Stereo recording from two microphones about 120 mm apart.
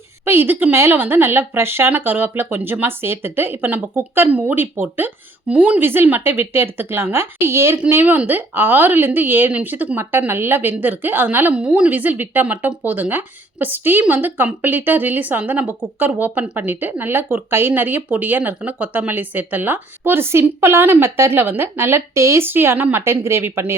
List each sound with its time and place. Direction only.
0.3 s a woman's voice: 20° right (ahead or behind)